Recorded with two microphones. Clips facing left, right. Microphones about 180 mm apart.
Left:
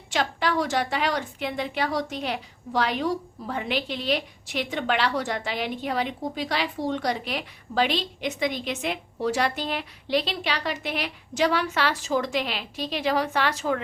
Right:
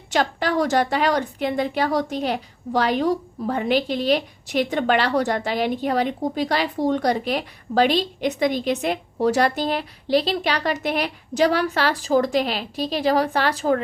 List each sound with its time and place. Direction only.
0.1 s speech: 40° right (ahead or behind)